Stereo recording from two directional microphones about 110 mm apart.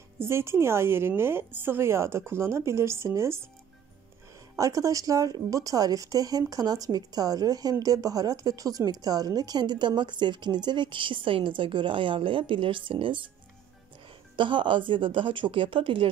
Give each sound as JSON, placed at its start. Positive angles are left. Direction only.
{"t": 0.2, "sound": "a woman's voice", "side_deg": -25}
{"t": 4.6, "sound": "a woman's voice", "side_deg": -30}
{"t": 14.3, "sound": "speech", "side_deg": -50}